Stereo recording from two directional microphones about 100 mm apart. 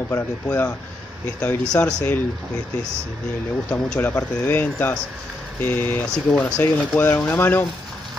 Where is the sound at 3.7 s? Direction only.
15° left (ahead or behind).